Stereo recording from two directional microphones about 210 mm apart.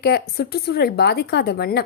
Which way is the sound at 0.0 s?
50° left (ahead or behind).